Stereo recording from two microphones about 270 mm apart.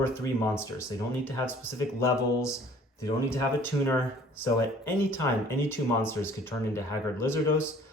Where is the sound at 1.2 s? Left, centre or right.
Centre.